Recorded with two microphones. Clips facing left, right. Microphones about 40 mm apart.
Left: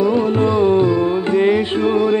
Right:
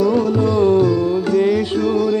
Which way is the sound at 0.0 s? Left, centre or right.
Left.